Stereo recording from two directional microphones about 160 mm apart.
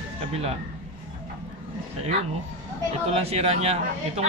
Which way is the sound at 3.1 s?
40° right (ahead or behind).